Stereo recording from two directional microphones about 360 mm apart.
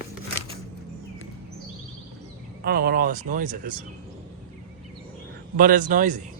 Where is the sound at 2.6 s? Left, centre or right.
Right.